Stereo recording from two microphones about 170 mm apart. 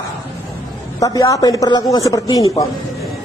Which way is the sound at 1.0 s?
20° left (ahead or behind).